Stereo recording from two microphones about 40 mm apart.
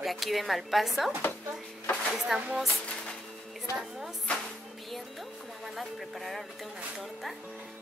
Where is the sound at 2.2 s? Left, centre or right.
Centre.